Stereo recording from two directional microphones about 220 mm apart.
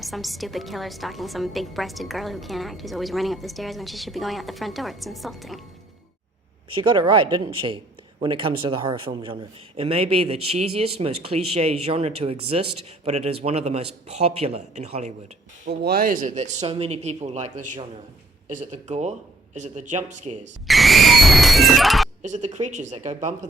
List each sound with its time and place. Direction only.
0.0 s a woman's voice: centre (ahead or behind)
6.7 s a man's voice: 20° right (ahead or behind)
15.6 s speech: 45° right (ahead or behind)
20.7 s speech: centre (ahead or behind)
22.2 s speech: 30° right (ahead or behind)